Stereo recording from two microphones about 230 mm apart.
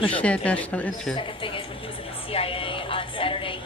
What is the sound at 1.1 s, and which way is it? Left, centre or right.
Speech, left.